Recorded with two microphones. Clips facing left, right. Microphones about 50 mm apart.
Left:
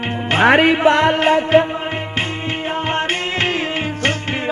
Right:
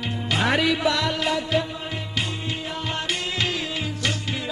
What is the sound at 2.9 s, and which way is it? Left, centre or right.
Music, left.